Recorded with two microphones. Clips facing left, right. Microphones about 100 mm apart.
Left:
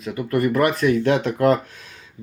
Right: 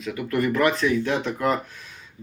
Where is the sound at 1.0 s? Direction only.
75° left (ahead or behind).